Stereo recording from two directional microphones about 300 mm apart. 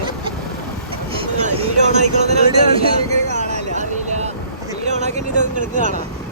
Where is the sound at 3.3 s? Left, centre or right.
Right.